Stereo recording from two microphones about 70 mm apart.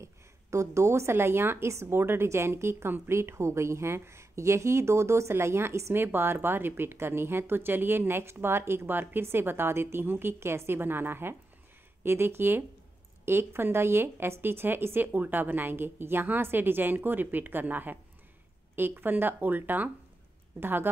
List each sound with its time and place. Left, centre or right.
0.0 s a woman's voice: right